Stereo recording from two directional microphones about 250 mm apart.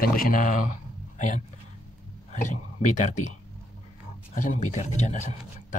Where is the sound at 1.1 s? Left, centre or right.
Left.